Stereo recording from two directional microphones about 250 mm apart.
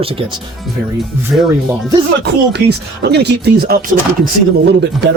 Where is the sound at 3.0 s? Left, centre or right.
Right.